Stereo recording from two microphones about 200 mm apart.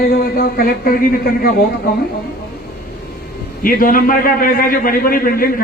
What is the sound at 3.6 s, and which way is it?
A man's voice, 45° left (ahead or behind).